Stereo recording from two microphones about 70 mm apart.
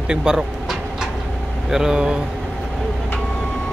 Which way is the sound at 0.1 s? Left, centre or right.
Centre.